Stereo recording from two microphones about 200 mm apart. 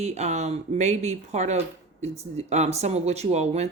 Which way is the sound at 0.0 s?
35° right (ahead or behind).